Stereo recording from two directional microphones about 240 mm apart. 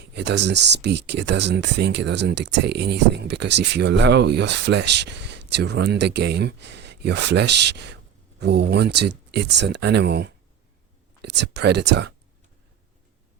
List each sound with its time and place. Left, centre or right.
0.0 s speech: right